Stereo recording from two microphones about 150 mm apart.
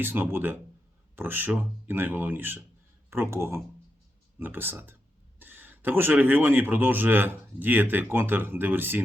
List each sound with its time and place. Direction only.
0.0 s speech: 15° right (ahead or behind)